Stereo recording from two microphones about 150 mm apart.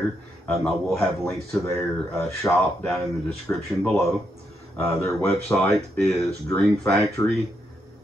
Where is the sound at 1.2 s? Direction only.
15° left (ahead or behind).